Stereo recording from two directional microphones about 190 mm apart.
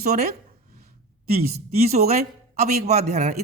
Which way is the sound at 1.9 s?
35° right (ahead or behind).